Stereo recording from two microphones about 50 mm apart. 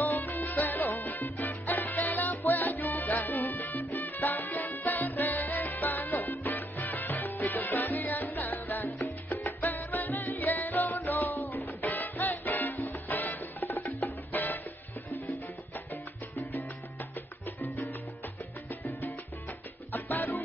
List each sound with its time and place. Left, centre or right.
0.0 s salsa music: left
9.3 s music: left
13.7 s music: left
14.0 s music: left
17.6 s salsa music: left
18.7 s music: left
19.9 s salsa music: left